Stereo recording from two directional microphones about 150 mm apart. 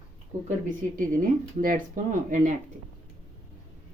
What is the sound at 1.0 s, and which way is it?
Speech, 60° right (ahead or behind).